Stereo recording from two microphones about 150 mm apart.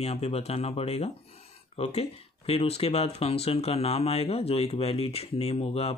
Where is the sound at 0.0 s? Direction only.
45° left (ahead or behind).